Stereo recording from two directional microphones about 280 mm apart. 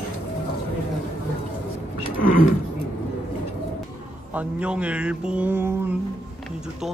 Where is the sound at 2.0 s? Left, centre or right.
Left.